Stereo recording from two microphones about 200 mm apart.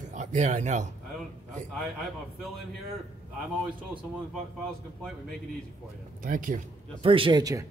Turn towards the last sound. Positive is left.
turn(degrees=-20)  # may be behind; listen again after turning